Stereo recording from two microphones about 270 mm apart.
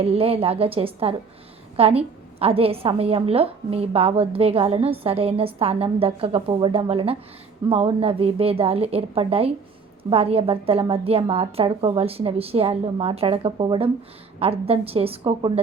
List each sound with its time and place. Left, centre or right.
0.0 s a woman's voice: right